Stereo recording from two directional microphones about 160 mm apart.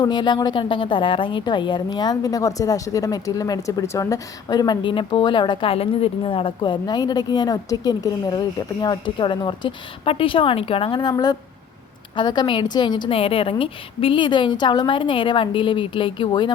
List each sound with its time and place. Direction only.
0.0 s a woman's voice: 30° left (ahead or behind)